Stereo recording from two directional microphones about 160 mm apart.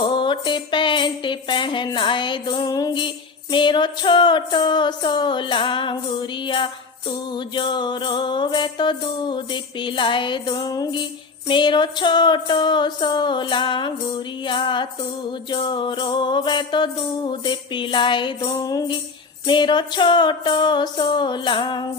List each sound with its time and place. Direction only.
0.1 s music: 30° left (ahead or behind)